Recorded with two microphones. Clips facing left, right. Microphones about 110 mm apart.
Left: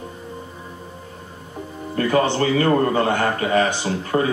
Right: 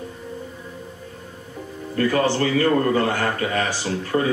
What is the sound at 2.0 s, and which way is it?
A man's voice, 25° left (ahead or behind).